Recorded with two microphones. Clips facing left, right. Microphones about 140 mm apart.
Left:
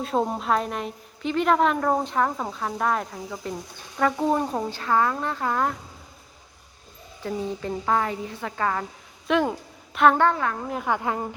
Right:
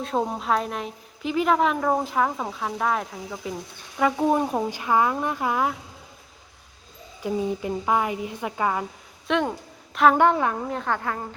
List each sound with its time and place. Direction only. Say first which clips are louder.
0.0 s a woman's voice: left 1 dB; centre (ahead or behind)
7.2 s a woman's voice: right 3 dB; 15° right (ahead or behind)
9.2 s a woman's voice: left 2 dB; centre (ahead or behind)
10.2 s a woman's voice: right 2 dB; 20° right (ahead or behind)
10.7 s a woman's voice: left 1 dB; 10° left (ahead or behind)